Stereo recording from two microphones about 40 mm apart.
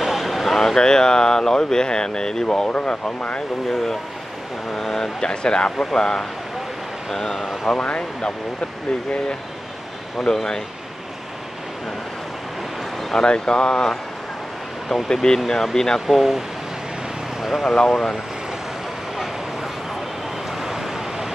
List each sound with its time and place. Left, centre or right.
0.0 s a sound: centre
0.6 s speech: centre
2.7 s speech: left
4.7 s speech: centre
7.7 s speech: left
10.1 s speech: centre
13.2 s speech: left
15.2 s speech: centre
16.1 s speech: centre
17.6 s speech: centre
20.6 s a sound: centre